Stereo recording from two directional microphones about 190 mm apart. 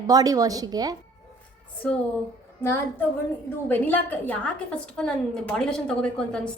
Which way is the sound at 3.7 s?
10° left (ahead or behind).